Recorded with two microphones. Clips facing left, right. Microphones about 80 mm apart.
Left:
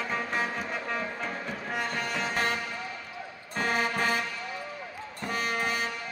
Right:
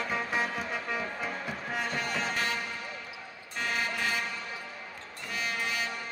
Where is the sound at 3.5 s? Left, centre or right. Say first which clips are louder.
Left 4 dB; left.